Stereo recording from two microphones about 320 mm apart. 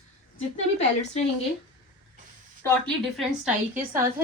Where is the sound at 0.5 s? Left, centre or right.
Centre.